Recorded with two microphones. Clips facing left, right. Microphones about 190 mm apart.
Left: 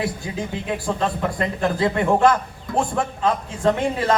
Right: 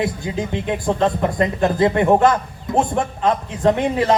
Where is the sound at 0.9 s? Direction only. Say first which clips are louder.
Right 6 dB; 25° right (ahead or behind).